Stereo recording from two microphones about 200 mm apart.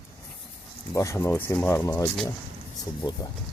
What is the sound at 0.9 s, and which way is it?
Speech, 15° left (ahead or behind).